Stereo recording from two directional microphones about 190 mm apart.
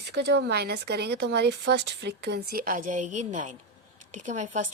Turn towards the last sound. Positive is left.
turn(degrees=-40)  # may be behind; listen again after turning